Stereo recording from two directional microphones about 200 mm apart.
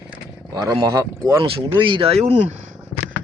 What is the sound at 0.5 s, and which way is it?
Speech, 20° right (ahead or behind).